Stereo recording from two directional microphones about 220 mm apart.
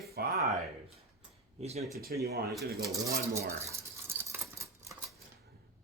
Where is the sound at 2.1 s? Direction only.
45° right (ahead or behind).